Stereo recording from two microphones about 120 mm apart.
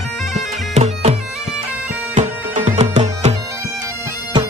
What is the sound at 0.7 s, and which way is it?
Bagpipes, 70° right (ahead or behind).